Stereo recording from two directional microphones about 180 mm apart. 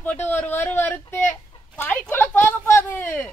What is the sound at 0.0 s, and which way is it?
Speech, 10° left (ahead or behind).